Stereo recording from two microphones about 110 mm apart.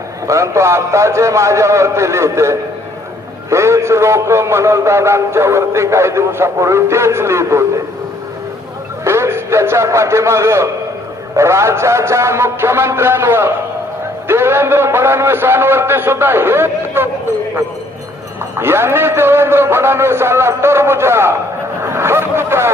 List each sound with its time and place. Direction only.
0.3 s a man's voice: 25° right (ahead or behind)
9.0 s a man's voice: 25° right (ahead or behind)
18.5 s a man's voice: 20° right (ahead or behind)
21.8 s a sound: 25° right (ahead or behind)